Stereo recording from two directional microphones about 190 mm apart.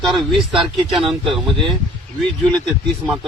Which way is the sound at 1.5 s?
25° right (ahead or behind).